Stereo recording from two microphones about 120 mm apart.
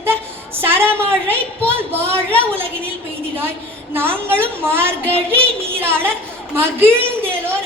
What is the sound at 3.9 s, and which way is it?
A woman's voice, 20° right (ahead or behind).